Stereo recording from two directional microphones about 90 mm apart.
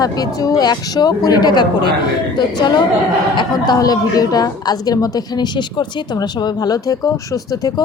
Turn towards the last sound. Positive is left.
turn(degrees=40)  # may be behind; listen again after turning